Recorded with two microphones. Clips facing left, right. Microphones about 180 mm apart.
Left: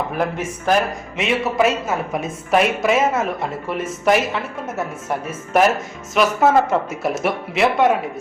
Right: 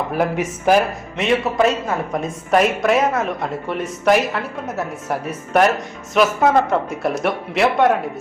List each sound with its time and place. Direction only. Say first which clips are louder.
0.2 s speech: right 2 dB; 10° right (ahead or behind)
1.1 s speech: right 2 dB; centre (ahead or behind)